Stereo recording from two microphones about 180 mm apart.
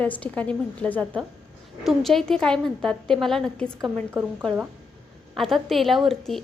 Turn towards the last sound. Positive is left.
turn(degrees=0)  # may be behind; listen again after turning